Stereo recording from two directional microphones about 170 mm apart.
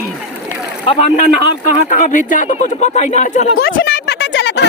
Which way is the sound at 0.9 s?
40° left (ahead or behind).